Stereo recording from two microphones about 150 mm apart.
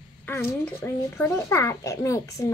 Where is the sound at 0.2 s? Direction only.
15° left (ahead or behind).